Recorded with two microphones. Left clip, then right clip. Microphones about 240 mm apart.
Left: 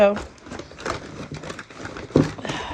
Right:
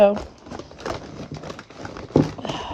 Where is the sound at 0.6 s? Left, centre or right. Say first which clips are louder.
Left 1 dB; right.